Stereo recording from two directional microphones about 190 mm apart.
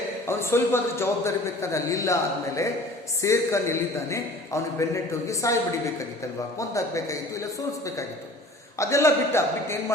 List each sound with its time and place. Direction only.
0.3 s a man's voice: 15° left (ahead or behind)
6.6 s a man's voice: 15° left (ahead or behind)
8.8 s a man's voice: 15° left (ahead or behind)